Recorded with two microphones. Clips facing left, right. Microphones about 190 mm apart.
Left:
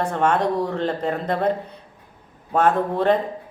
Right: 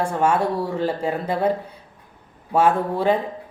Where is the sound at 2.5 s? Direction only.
10° right (ahead or behind).